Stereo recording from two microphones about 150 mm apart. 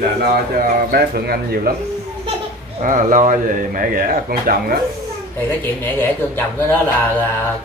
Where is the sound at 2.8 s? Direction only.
60° right (ahead or behind); by 4.7 s 75° right (ahead or behind).